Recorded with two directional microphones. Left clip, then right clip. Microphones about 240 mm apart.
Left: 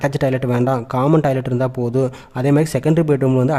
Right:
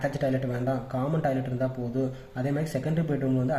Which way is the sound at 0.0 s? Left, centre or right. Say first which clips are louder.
Left 9 dB; left.